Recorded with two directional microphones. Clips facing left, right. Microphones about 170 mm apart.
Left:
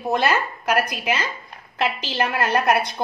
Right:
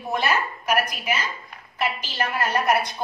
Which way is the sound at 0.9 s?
85° left.